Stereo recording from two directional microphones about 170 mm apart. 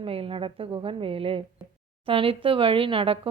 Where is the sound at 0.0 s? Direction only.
35° right (ahead or behind).